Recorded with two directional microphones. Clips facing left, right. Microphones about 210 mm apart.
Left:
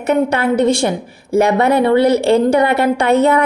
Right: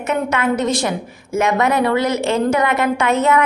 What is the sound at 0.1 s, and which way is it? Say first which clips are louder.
A woman's voice: left 5 dB; 35° left (ahead or behind).